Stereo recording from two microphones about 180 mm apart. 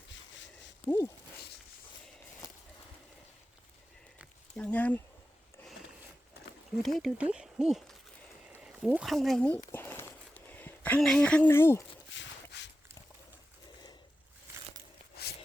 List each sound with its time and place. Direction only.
0.9 s speech: 15° left (ahead or behind)
2.4 s walk: 15° left (ahead or behind)
4.5 s speech: 5° left (ahead or behind)
6.8 s speech: centre (ahead or behind)
9.7 s a sound: 15° left (ahead or behind)
12.1 s a sound: 75° left (ahead or behind)